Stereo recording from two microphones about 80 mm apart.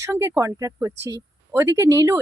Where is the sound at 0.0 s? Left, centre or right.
Right.